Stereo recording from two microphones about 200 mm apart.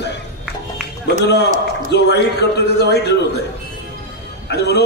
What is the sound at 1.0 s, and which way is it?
A man's voice, 55° left (ahead or behind).